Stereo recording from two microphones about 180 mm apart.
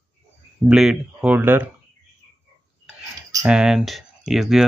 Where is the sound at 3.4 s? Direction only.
5° right (ahead or behind).